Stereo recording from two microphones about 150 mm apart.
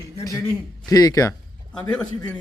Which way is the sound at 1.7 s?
5° left (ahead or behind).